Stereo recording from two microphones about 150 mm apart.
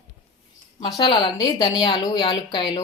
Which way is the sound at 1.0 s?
35° left (ahead or behind).